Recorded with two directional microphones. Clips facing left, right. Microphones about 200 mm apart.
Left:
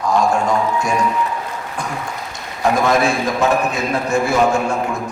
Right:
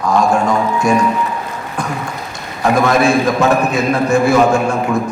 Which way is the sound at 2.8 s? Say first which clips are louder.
Right 6 dB; 65° right (ahead or behind).